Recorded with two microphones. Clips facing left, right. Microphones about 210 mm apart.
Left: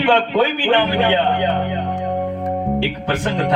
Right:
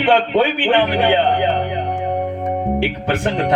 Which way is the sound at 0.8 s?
20° right (ahead or behind).